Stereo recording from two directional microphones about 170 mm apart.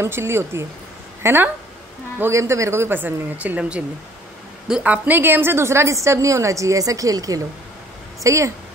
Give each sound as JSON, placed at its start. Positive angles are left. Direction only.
{"t": 0.0, "sound": "a woman's voice", "side_deg": -15}